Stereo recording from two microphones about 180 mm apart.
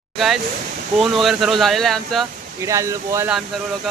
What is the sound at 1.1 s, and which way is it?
Speech, centre (ahead or behind).